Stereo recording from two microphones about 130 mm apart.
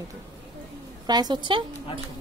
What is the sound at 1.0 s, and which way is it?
Speech, 30° right (ahead or behind).